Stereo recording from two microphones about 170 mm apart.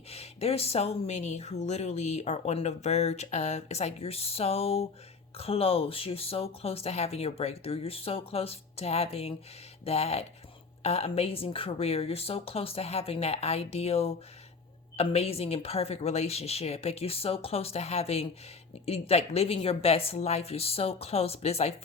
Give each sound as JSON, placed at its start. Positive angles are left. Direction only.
{"t": 0.1, "sound": "speech", "side_deg": 35}